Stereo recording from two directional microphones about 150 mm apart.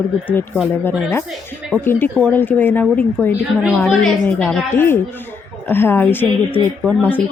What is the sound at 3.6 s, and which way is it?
A woman's voice, centre (ahead or behind).